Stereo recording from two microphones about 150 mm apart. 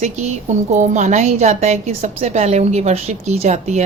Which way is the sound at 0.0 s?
50° right (ahead or behind).